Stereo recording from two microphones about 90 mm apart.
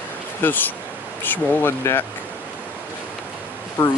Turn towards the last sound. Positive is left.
turn(degrees=25)  # may be behind; listen again after turning